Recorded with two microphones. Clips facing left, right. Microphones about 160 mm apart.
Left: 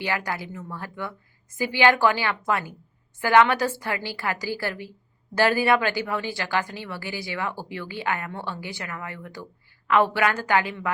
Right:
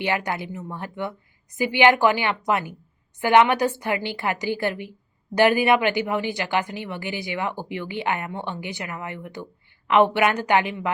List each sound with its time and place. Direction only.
0.0 s a woman's voice: 20° right (ahead or behind)